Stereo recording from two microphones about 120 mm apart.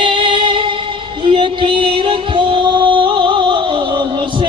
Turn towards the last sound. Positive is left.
turn(degrees=-45)  # may be behind; listen again after turning